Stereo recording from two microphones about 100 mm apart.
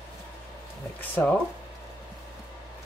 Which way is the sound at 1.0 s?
15° left (ahead or behind).